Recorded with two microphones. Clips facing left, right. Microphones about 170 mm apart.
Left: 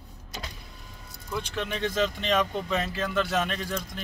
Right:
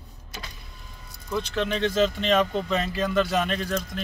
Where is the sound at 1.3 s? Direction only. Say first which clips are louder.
Right 5 dB; 10° left (ahead or behind).